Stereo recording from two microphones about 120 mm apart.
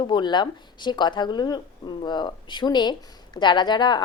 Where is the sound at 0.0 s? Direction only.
40° left (ahead or behind).